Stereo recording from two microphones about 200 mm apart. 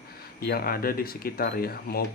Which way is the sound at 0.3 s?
50° left (ahead or behind).